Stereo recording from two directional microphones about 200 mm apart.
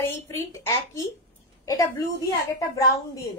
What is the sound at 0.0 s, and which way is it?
Female singing, 15° left (ahead or behind).